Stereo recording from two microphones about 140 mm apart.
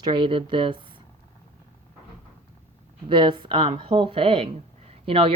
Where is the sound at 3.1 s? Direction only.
35° right (ahead or behind).